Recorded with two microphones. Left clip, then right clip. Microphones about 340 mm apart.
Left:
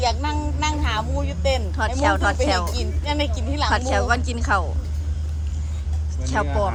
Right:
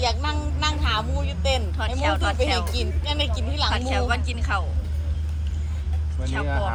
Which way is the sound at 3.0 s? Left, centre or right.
Left.